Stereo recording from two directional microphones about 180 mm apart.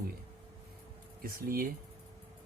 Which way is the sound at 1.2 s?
55° right (ahead or behind).